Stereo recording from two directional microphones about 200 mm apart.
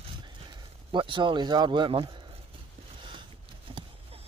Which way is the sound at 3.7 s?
30° right (ahead or behind).